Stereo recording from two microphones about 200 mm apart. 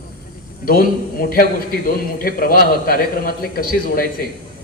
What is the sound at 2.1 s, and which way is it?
A man's voice, 45° left (ahead or behind).